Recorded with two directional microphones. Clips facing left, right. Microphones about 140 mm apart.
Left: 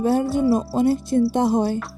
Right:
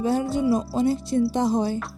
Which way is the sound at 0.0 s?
55° left (ahead or behind).